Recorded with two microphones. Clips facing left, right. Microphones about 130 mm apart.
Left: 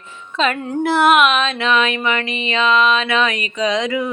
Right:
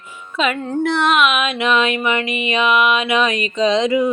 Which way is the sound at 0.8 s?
5° left (ahead or behind).